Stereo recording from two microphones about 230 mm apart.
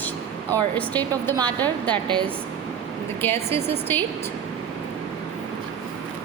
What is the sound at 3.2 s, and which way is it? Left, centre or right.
Speech, centre.